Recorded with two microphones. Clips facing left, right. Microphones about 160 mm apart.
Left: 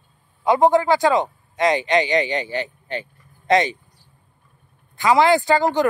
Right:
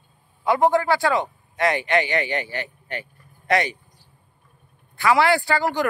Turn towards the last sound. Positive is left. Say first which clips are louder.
# left 4 dB
turn(degrees=20)  # may be behind; listen again after turning